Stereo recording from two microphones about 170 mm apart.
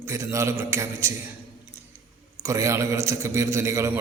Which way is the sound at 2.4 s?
20° right (ahead or behind).